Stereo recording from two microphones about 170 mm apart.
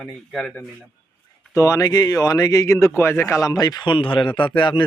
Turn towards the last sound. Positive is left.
turn(degrees=30)  # may be behind; listen again after turning